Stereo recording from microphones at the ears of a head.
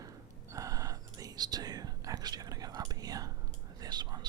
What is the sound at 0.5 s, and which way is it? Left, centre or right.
Whispering, right.